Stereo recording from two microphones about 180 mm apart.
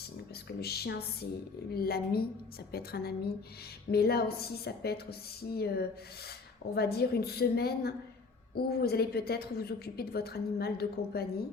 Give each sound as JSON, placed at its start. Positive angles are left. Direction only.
{"t": 0.4, "sound": "a woman's voice", "side_deg": 60}